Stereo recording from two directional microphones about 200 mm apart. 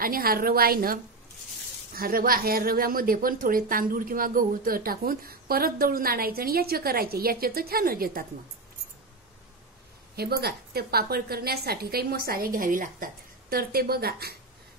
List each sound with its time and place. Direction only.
0.0 s a woman's voice: 45° right (ahead or behind)
2.0 s a woman's voice: 45° right (ahead or behind)
10.1 s a woman's voice: 50° right (ahead or behind)